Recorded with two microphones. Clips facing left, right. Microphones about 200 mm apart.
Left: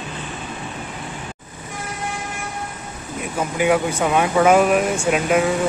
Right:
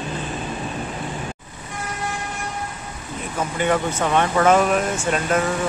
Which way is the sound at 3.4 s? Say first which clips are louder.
Left 3 dB; 10° left (ahead or behind).